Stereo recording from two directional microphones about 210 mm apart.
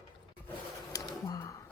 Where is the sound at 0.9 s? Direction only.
15° left (ahead or behind).